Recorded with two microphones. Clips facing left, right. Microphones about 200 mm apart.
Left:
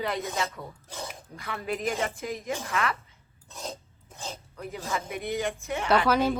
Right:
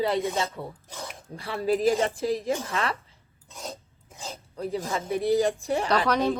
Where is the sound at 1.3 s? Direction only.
30° right (ahead or behind).